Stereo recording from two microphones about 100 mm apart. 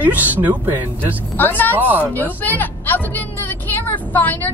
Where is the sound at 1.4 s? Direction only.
20° left (ahead or behind).